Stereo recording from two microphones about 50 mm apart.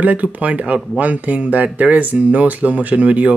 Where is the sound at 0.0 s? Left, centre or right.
Right.